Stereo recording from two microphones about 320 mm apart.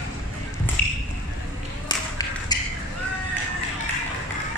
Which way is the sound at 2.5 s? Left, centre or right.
Centre.